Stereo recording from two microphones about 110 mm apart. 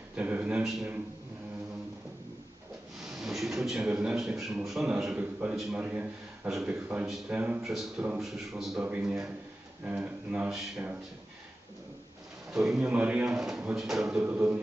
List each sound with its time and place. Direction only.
0.1 s speech: 15° right (ahead or behind)
3.0 s a sound: 5° right (ahead or behind)
4.4 s speech: 5° right (ahead or behind)
7.6 s a man's voice: 5° right (ahead or behind)
12.5 s speech: 5° right (ahead or behind)